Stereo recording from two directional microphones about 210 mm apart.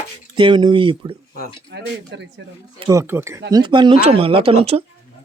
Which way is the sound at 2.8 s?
15° right (ahead or behind).